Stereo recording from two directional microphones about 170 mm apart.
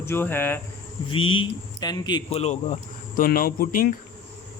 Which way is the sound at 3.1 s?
60° left (ahead or behind).